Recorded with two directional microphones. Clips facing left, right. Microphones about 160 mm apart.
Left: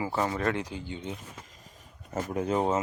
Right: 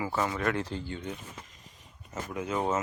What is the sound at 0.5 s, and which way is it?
Speech, 15° left (ahead or behind).